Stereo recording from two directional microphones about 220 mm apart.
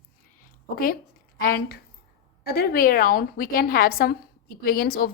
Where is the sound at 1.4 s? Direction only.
45° left (ahead or behind).